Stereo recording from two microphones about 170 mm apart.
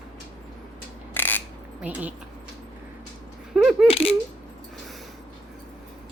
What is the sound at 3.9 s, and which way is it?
Coin, 35° left (ahead or behind).